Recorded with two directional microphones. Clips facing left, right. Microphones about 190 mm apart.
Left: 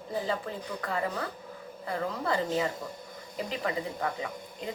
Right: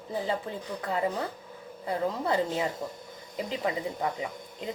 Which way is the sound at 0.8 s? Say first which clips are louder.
Right 3 dB; 20° right (ahead or behind).